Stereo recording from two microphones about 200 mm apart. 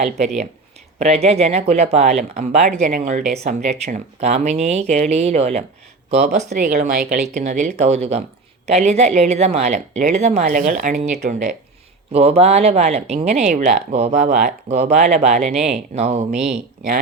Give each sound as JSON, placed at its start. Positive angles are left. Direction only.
{"t": 0.0, "sound": "speech", "side_deg": -35}